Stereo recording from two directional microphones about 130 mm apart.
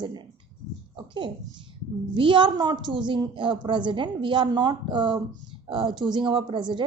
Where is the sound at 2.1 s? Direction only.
40° right (ahead or behind).